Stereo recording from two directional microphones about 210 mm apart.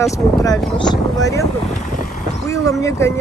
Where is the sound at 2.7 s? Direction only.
15° left (ahead or behind).